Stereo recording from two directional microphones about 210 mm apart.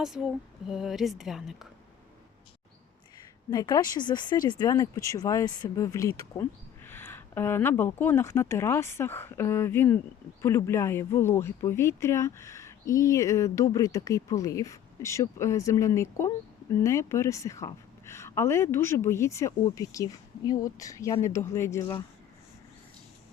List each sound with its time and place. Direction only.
0.0 s speech: centre (ahead or behind)
3.5 s speech: 20° left (ahead or behind)